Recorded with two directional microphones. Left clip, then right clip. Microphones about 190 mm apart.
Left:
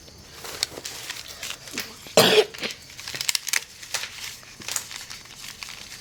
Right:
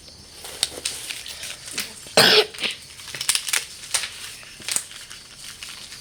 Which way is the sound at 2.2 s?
15° left (ahead or behind).